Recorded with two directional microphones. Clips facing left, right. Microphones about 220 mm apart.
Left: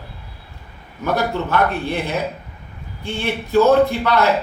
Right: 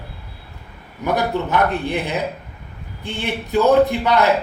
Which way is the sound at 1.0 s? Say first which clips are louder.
Even; 15° right (ahead or behind).